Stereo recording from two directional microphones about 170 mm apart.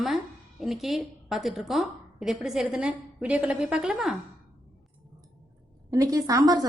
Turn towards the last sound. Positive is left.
turn(degrees=-20)  # may be behind; listen again after turning